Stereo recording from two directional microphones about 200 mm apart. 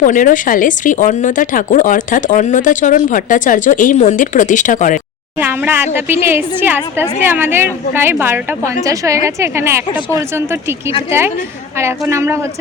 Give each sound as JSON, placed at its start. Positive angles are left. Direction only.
{"t": 0.0, "sound": "a woman's voice", "side_deg": 40}
{"t": 5.4, "sound": "a woman's voice", "side_deg": -10}